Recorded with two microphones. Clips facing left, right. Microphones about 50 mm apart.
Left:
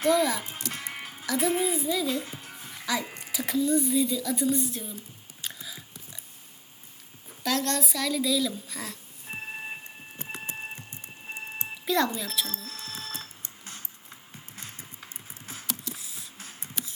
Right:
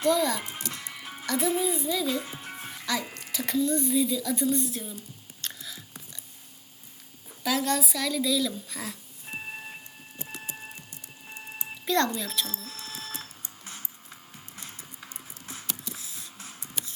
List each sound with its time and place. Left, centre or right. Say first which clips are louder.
0.1 s speech: left 1 dB; centre
0.7 s music: left 3 dB; left
1.2 s speech: even; centre
2.2 s music: right 2 dB; right
2.7 s speech: left 1 dB; centre
5.4 s a sound: even; centre
7.3 s speech: right 1 dB; centre
10.2 s printer: left 2 dB; left
10.9 s a sound: left 4 dB; left
11.9 s speech: even; centre
12.5 s speech: left 1 dB; centre
12.7 s alarm clock: left 1 dB; right
15.6 s a sound: left 3 dB; centre